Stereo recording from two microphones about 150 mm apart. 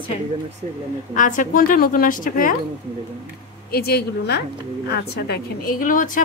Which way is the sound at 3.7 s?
90° left.